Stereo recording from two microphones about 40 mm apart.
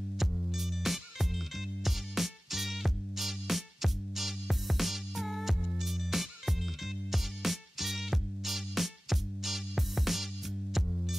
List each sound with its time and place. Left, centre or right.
0.2 s music: centre